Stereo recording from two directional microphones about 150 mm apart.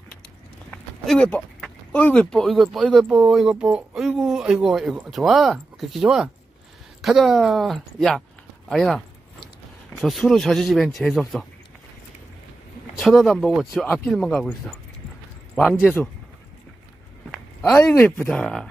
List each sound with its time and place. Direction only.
0.7 s speech: 5° left (ahead or behind)
10.0 s speech: centre (ahead or behind)
13.0 s speech: centre (ahead or behind)
15.5 s speech: 10° left (ahead or behind)
17.8 s speech: 15° left (ahead or behind)